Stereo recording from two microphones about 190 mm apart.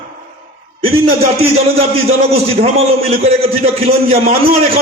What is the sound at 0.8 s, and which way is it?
A man's voice, 30° right (ahead or behind).